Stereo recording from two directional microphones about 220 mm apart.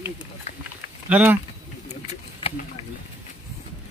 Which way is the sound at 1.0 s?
5° right (ahead or behind).